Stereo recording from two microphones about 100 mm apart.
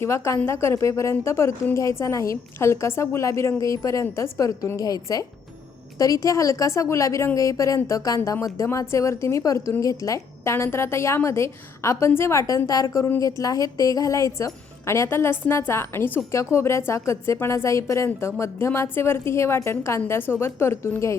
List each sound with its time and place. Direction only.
0.0 s a woman's voice: 25° left (ahead or behind)